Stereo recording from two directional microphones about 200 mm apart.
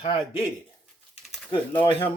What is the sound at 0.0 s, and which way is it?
Speech, 30° left (ahead or behind).